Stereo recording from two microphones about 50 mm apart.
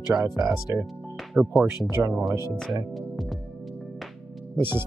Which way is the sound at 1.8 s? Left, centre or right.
Right.